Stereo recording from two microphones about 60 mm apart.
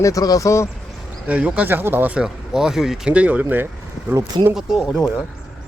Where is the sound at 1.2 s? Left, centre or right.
Right.